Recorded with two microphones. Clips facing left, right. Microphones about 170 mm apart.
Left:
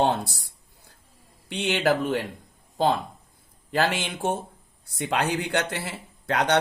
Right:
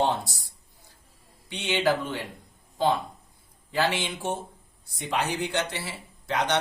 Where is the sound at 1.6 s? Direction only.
45° left (ahead or behind).